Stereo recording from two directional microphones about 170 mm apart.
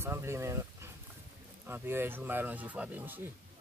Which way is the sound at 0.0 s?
15° right (ahead or behind).